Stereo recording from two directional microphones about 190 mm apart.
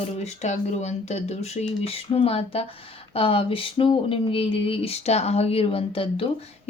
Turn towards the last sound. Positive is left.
turn(degrees=30)  # may be behind; listen again after turning